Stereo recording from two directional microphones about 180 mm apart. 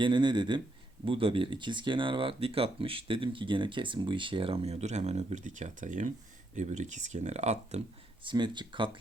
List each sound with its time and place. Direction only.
0.0 s speech: 25° right (ahead or behind)
8.2 s speech: 25° right (ahead or behind)